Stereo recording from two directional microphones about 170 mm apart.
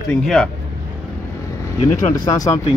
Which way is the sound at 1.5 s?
20° left (ahead or behind).